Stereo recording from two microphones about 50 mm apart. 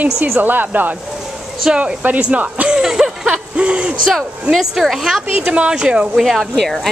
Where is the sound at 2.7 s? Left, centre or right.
Centre.